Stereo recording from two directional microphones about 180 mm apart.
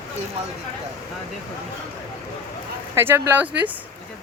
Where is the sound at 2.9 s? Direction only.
15° right (ahead or behind).